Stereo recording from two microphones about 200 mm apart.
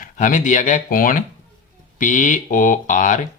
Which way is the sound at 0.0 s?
40° left (ahead or behind).